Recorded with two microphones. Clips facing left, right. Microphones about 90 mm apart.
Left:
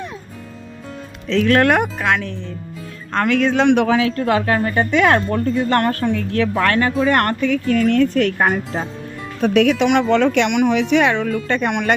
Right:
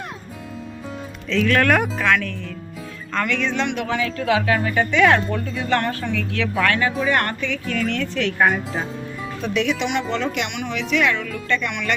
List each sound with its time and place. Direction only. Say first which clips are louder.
1.3 s speech: left 3 dB; 35° left (ahead or behind)
3.1 s speech: left 6 dB; 40° left (ahead or behind)
3.7 s a man's voice: left 9 dB; 70° left (ahead or behind)
4.2 s speech: left 2 dB; 45° left (ahead or behind)